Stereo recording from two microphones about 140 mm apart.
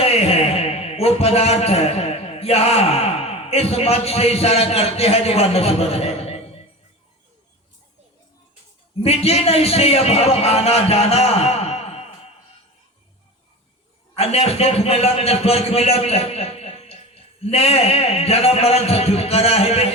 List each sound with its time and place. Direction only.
0.0 s a man's voice: 45° left (ahead or behind)
9.0 s a man's voice: 45° left (ahead or behind)
14.2 s a man's voice: 45° left (ahead or behind)